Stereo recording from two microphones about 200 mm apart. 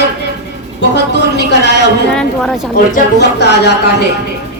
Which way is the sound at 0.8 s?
60° left (ahead or behind).